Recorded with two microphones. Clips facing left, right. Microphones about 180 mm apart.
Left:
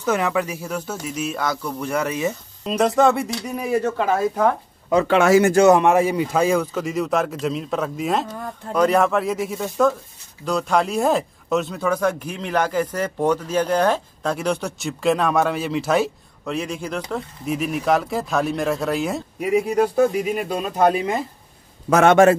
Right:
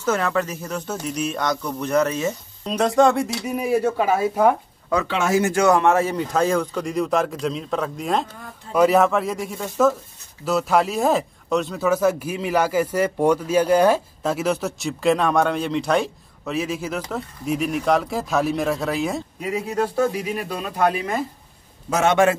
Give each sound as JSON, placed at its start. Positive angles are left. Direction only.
{"t": 0.0, "sound": "speech", "side_deg": 15}
{"t": 2.6, "sound": "speech", "side_deg": 0}
{"t": 5.0, "sound": "speech", "side_deg": 65}
{"t": 5.6, "sound": "speech", "side_deg": 20}
{"t": 19.4, "sound": "speech", "side_deg": 15}
{"t": 21.8, "sound": "a man's voice", "side_deg": 55}